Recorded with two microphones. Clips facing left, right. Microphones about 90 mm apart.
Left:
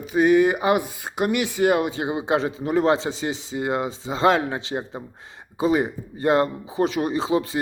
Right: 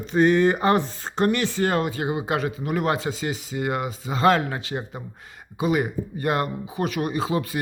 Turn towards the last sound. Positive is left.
turn(degrees=25)  # may be behind; listen again after turning